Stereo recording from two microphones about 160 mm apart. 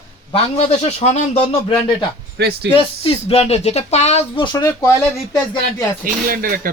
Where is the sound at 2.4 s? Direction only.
90° right.